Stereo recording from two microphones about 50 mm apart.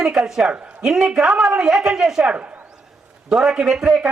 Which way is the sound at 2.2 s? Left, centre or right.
Right.